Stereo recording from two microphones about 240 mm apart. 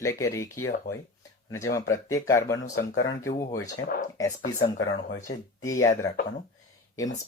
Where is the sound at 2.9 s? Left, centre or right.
Left.